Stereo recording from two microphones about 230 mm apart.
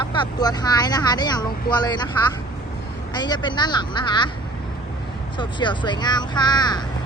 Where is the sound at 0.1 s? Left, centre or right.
Centre.